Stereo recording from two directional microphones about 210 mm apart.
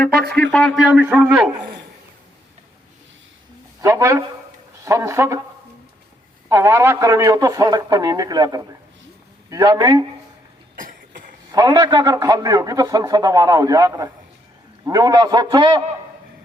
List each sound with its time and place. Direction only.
0.5 s a man's voice: centre (ahead or behind)
3.8 s a man's voice: 15° right (ahead or behind)
6.5 s a man's voice: 15° right (ahead or behind)
10.8 s cough: 40° right (ahead or behind)
11.5 s a man's voice: 15° right (ahead or behind)